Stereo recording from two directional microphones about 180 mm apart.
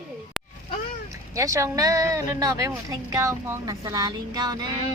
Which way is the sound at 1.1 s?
15° right (ahead or behind).